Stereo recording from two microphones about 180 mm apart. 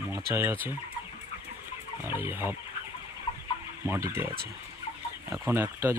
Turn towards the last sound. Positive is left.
turn(degrees=-10)  # may be behind; listen again after turning